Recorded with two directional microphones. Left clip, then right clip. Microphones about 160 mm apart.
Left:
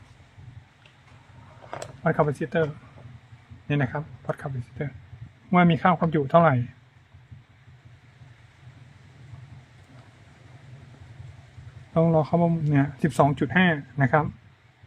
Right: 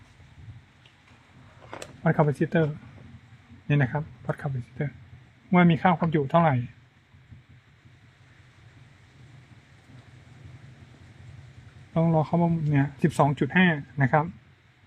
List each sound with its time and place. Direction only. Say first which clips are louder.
2.0 s speech: left 1 dB; centre (ahead or behind)
11.9 s speech: left 3 dB; 15° left (ahead or behind)